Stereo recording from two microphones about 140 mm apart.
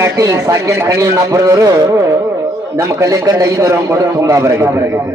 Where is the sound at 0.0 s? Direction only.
25° right (ahead or behind).